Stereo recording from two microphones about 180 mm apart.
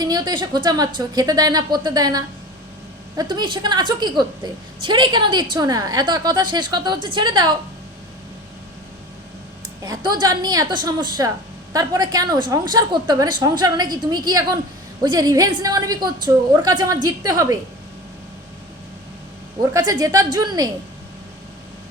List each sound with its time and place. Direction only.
0.0 s a woman's voice: 25° right (ahead or behind)
9.8 s a woman's voice: 20° right (ahead or behind)
19.7 s a woman's voice: 20° right (ahead or behind)